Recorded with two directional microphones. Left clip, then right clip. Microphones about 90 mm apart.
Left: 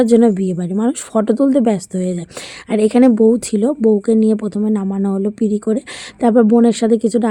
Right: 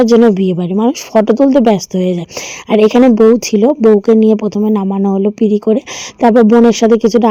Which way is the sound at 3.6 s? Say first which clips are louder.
Right 6 dB; 20° right (ahead or behind).